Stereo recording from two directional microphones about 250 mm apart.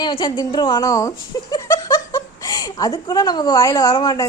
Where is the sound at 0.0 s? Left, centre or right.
Centre.